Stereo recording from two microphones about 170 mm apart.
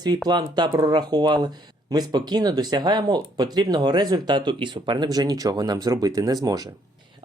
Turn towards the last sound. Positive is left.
turn(degrees=-20)  # may be behind; listen again after turning